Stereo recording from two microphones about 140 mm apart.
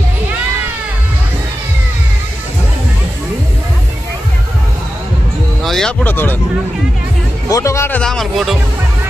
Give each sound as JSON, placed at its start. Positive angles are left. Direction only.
{"t": 5.6, "sound": "music", "side_deg": 5}
{"t": 7.4, "sound": "speech", "side_deg": 20}
{"t": 8.0, "sound": "speech", "side_deg": 0}